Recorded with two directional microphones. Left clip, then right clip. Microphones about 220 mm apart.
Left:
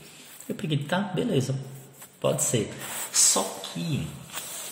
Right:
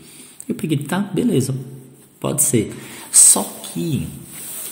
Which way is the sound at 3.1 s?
50° right (ahead or behind).